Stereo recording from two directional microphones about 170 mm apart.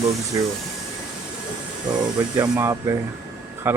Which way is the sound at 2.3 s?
20° right (ahead or behind).